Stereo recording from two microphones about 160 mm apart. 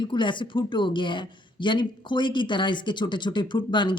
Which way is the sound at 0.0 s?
30° left (ahead or behind).